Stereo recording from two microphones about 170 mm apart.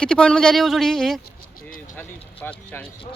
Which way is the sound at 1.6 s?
55° left (ahead or behind).